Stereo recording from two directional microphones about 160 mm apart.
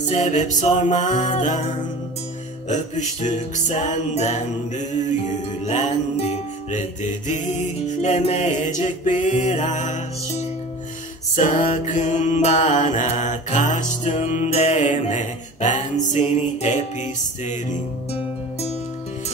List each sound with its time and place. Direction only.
0.0 s music: 50° left (ahead or behind)
2.7 s music: 50° left (ahead or behind)
18.1 s music: 40° left (ahead or behind)